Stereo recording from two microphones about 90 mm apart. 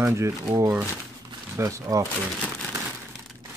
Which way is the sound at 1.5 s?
35° right (ahead or behind).